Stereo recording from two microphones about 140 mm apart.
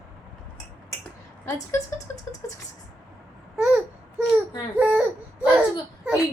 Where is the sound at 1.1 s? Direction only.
20° left (ahead or behind).